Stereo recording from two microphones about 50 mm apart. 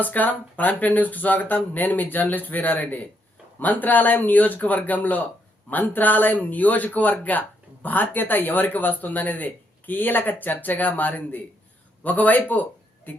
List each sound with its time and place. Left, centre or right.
0.0 s speech: left